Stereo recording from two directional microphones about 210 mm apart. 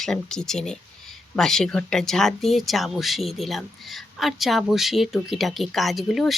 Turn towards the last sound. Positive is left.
turn(degrees=0)  # may be behind; listen again after turning